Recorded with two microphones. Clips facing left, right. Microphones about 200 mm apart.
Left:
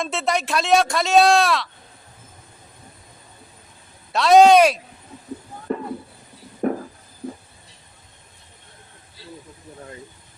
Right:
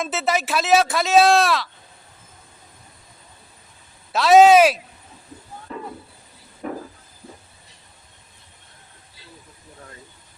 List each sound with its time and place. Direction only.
0.0 s speech: 5° right (ahead or behind)
4.1 s speech: centre (ahead or behind)
5.7 s a sound: 55° left (ahead or behind)